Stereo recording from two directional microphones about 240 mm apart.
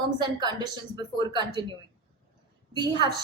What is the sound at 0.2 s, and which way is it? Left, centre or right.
A woman's voice, centre.